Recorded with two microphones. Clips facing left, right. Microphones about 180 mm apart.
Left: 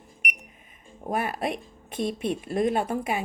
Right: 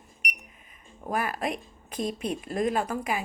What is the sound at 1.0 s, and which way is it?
Speech, 25° left (ahead or behind).